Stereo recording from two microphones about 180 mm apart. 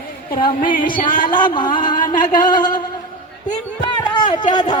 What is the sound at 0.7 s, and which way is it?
Music, 50° left (ahead or behind).